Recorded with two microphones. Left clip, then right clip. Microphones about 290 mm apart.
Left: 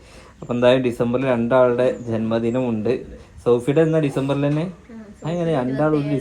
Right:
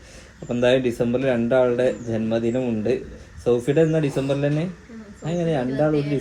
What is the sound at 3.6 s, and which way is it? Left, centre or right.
Speech, centre.